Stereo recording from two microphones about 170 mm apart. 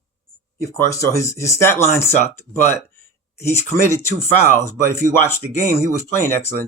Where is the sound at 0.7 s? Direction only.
20° left (ahead or behind).